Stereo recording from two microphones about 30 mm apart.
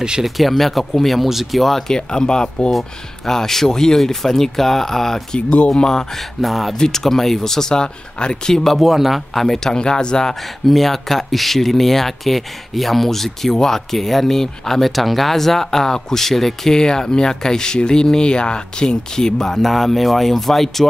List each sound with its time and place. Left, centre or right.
0.2 s speech: centre
2.0 s speech: left
3.3 s speech: centre
6.4 s speech: centre
6.8 s speech: centre
7.8 s speech: left
8.7 s speech: centre
9.3 s speech: centre
9.6 s speech: left
10.7 s speech: centre
14.9 s speech: centre
16.7 s speech: left
19.6 s speech: centre